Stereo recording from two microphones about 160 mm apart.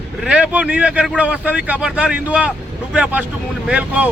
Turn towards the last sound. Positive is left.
turn(degrees=-10)  # may be behind; listen again after turning